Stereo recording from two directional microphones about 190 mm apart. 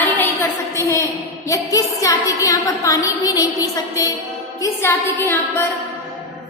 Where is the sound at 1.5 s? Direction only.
15° left (ahead or behind).